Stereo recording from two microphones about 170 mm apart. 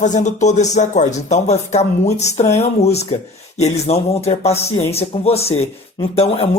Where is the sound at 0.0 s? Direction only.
45° left (ahead or behind).